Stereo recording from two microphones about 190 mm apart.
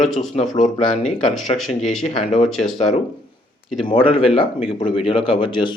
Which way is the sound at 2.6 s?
35° left (ahead or behind).